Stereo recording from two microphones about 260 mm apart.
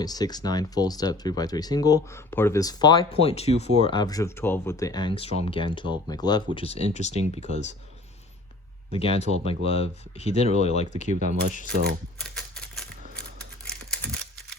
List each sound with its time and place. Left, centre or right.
0.0 s speech: centre
8.9 s speech: left
11.1 s speech: right
12.2 s typewriter: centre
13.7 s a sound: centre